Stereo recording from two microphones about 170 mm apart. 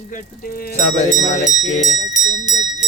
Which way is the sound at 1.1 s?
45° left (ahead or behind).